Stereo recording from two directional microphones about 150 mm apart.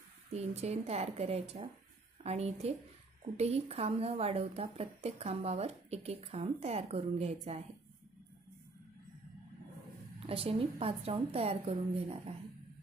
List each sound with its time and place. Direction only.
0.3 s speech: 45° right (ahead or behind)
10.2 s a woman's voice: 40° right (ahead or behind)